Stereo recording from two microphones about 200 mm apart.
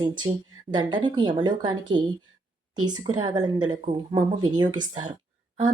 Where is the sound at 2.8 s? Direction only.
20° right (ahead or behind).